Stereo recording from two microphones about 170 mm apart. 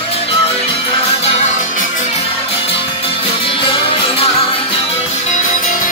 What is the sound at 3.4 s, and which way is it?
Music, 30° left (ahead or behind).